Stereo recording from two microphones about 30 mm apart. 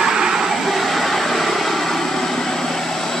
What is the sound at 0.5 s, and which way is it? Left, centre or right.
Vehicle, centre.